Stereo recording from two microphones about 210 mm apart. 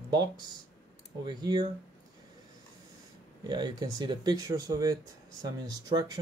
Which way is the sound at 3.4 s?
20° right (ahead or behind).